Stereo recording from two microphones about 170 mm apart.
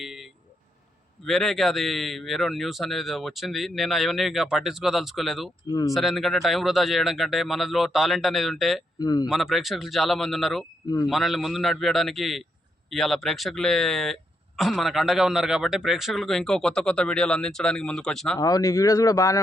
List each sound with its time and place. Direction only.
0.0 s a sound: centre (ahead or behind)
1.2 s speech: centre (ahead or behind)
9.0 s a man's voice: 20° left (ahead or behind)
9.3 s speech: centre (ahead or behind)
10.8 s a man's voice: 20° left (ahead or behind)
11.1 s speech: centre (ahead or behind)
18.3 s a man's voice: 20° left (ahead or behind)